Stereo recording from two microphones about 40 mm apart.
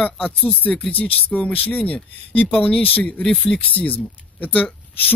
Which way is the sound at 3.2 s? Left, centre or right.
Left.